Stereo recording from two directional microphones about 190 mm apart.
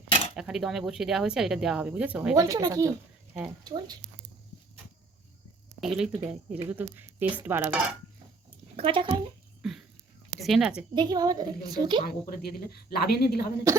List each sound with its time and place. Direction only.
0.3 s speech: centre (ahead or behind)
2.3 s a woman's voice: 15° right (ahead or behind)
5.8 s speech: centre (ahead or behind)
8.7 s speech: 30° right (ahead or behind)
9.6 s a sound: centre (ahead or behind)
10.4 s speech: centre (ahead or behind)
10.9 s a woman's voice: 20° right (ahead or behind)
12.0 s speech: 55° left (ahead or behind)